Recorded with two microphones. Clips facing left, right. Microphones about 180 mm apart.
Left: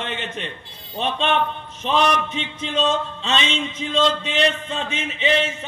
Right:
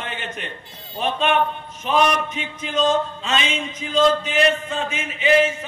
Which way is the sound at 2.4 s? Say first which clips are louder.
Right 1 dB; 25° left (ahead or behind).